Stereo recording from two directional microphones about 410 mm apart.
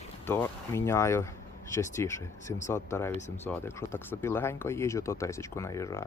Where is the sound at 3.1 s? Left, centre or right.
Centre.